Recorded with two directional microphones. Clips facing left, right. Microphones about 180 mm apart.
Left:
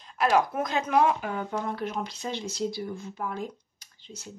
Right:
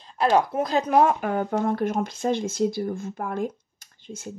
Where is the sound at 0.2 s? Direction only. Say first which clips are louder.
Right 3 dB; 30° right (ahead or behind).